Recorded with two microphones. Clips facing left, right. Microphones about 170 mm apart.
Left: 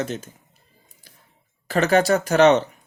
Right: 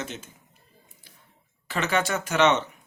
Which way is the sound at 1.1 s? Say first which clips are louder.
Left 2 dB; 40° left (ahead or behind).